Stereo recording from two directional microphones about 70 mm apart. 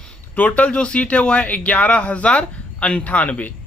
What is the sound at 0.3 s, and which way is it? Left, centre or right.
Speech, left.